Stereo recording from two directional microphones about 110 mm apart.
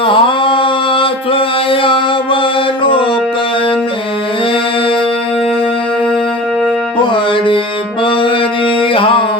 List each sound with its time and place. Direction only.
0.0 s a sound: 50° left (ahead or behind)
7.1 s music: 50° left (ahead or behind)
8.0 s mantra: 50° left (ahead or behind)